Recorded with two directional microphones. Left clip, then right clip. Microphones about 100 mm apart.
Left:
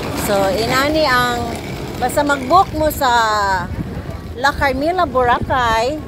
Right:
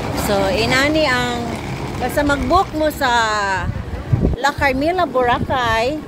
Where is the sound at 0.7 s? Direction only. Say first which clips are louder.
Left 2 dB; 90° right.